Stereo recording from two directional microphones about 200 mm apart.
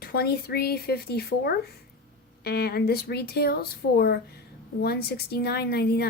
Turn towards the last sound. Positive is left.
turn(degrees=55)  # may be behind; listen again after turning